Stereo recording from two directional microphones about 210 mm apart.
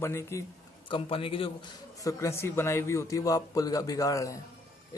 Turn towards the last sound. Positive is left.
turn(degrees=15)  # may be behind; listen again after turning